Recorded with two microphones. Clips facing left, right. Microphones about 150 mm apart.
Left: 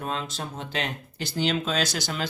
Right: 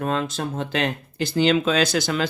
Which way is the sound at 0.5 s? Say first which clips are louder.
Right 7 dB; 85° right.